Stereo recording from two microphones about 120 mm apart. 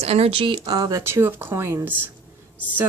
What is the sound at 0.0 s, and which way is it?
A woman's voice, 55° right (ahead or behind).